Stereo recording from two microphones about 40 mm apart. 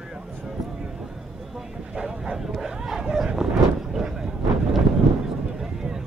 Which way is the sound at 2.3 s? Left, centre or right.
Centre.